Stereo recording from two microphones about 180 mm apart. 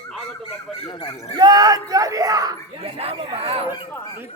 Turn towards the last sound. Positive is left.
turn(degrees=-30)  # may be behind; listen again after turning